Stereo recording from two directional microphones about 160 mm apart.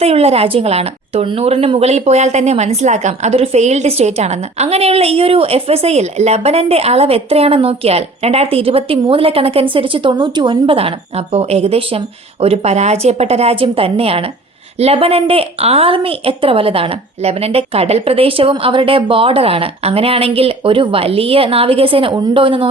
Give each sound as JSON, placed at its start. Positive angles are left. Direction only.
{"t": 0.0, "sound": "a woman's voice", "side_deg": -40}